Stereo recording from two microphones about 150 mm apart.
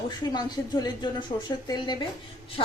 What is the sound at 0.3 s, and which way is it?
A woman's voice, 30° left (ahead or behind).